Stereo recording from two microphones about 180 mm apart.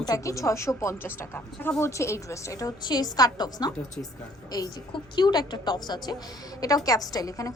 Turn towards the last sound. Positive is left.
turn(degrees=20)  # may be behind; listen again after turning